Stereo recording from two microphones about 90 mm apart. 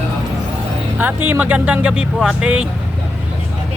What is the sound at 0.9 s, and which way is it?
Speech, 20° right (ahead or behind).